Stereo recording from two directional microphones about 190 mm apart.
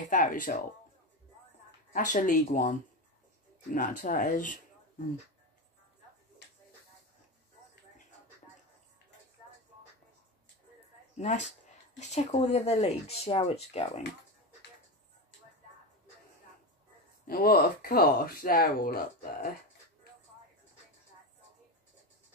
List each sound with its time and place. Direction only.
0.1 s speech: 45° left (ahead or behind)
1.9 s speech: 45° left (ahead or behind)
3.7 s speech: 45° left (ahead or behind)
11.1 s speech: 40° left (ahead or behind)
17.3 s speech: 50° left (ahead or behind)